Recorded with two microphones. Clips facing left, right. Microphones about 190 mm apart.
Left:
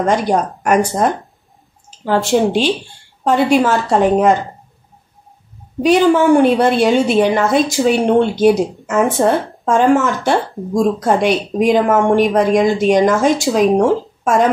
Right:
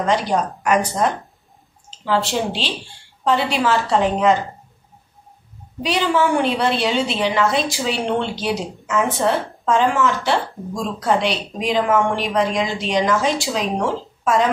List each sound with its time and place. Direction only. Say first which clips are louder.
0.0 s a woman's voice: left 4 dB; 50° left (ahead or behind)
5.8 s a woman's voice: left 8 dB; 50° left (ahead or behind)